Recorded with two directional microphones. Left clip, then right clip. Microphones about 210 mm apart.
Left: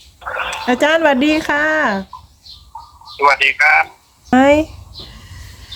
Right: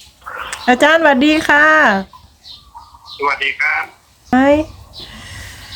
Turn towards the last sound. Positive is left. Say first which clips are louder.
# left 1 dB
turn(degrees=15)  # may be behind; listen again after turning